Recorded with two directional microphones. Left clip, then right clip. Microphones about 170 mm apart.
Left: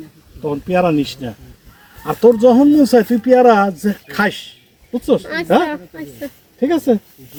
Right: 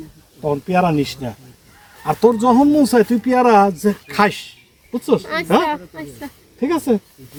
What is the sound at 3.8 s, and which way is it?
Speech, 20° right (ahead or behind).